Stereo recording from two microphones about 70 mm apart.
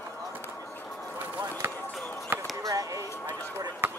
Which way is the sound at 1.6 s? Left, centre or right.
Right.